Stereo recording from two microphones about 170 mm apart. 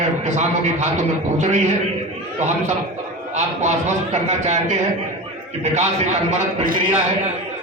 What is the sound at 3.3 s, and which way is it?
A man's voice, 45° right (ahead or behind).